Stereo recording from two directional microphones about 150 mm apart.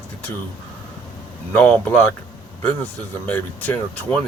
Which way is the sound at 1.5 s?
15° left (ahead or behind).